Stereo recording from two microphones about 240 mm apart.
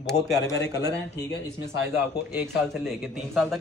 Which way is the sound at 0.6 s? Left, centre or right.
Left.